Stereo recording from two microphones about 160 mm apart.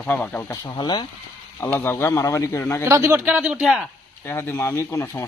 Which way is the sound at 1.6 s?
15° left (ahead or behind).